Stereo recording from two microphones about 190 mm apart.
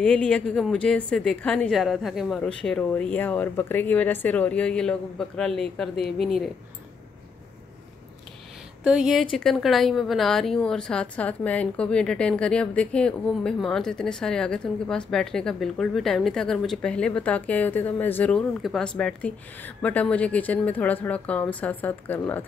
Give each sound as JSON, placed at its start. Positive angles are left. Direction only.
{"t": 0.0, "sound": "a woman's voice", "side_deg": 5}
{"t": 8.9, "sound": "a woman's voice", "side_deg": 0}